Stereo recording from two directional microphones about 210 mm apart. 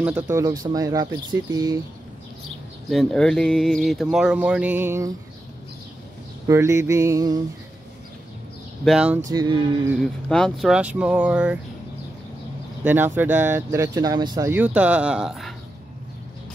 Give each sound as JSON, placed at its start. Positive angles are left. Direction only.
{"t": 0.0, "sound": "speech", "side_deg": -10}
{"t": 2.9, "sound": "speech", "side_deg": 0}
{"t": 6.4, "sound": "speech", "side_deg": -15}
{"t": 8.8, "sound": "speech", "side_deg": -5}
{"t": 9.2, "sound": "speech", "side_deg": -20}
{"t": 9.9, "sound": "speech", "side_deg": 0}
{"t": 12.8, "sound": "speech", "side_deg": -10}
{"t": 14.5, "sound": "speech", "side_deg": -5}